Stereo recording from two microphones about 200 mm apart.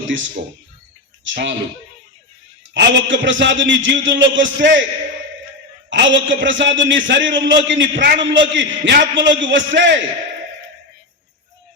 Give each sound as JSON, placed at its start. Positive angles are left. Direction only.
{"t": 1.2, "sound": "a man's voice", "side_deg": -65}
{"t": 2.7, "sound": "a man's voice", "side_deg": -65}
{"t": 5.9, "sound": "a man's voice", "side_deg": -65}